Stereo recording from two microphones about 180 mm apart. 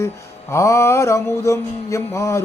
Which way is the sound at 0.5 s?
15° left (ahead or behind).